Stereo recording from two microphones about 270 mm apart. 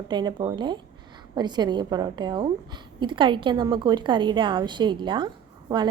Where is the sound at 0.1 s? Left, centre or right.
Centre.